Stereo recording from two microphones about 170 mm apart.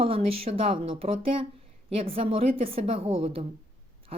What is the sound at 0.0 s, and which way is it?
A woman's voice, 35° right (ahead or behind).